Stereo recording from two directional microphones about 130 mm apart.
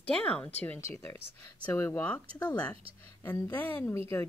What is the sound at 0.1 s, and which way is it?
Speech, 10° left (ahead or behind).